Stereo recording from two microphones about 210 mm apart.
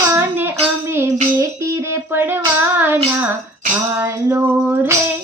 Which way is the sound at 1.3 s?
15° right (ahead or behind).